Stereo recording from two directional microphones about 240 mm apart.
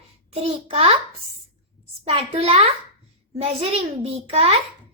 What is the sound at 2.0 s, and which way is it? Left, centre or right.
Speech, right.